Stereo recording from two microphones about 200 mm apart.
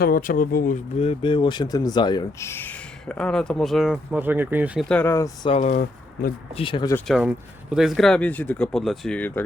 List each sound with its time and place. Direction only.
0.0 s speech: 45° left (ahead or behind); by 4.9 s 5° right (ahead or behind)
4.9 s speech: 10° left (ahead or behind)
5.5 s speech: 35° left (ahead or behind)
6.5 s speech: 25° left (ahead or behind)
7.1 s speech: 5° right (ahead or behind)